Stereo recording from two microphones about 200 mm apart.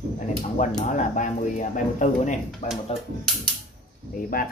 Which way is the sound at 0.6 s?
40° left (ahead or behind).